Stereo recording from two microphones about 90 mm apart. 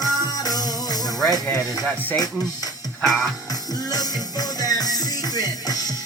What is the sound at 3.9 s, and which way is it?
Music, 45° left (ahead or behind).